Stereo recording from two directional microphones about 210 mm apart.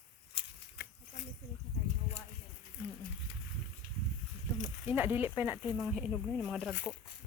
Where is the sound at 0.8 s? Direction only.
55° left (ahead or behind).